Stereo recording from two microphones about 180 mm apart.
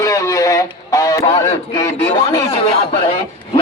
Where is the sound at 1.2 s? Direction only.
35° left (ahead or behind).